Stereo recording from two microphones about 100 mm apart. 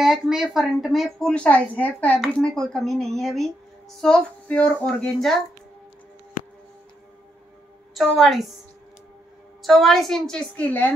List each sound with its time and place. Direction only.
0.0 s speech: 5° right (ahead or behind)
1.3 s speech: 10° left (ahead or behind)
2.1 s speech: centre (ahead or behind)
7.9 s speech: centre (ahead or behind)
9.6 s speech: centre (ahead or behind)
10.5 s speech: 15° left (ahead or behind)